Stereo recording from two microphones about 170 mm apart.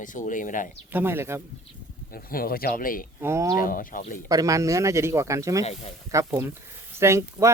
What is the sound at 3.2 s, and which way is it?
Speech, 15° right (ahead or behind).